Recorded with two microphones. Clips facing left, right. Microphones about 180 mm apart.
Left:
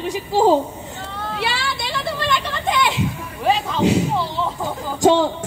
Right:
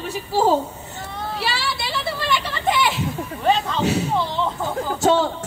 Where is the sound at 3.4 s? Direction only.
5° left (ahead or behind).